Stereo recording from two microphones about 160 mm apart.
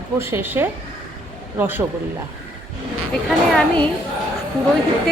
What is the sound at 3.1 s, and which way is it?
Speech, 5° left (ahead or behind).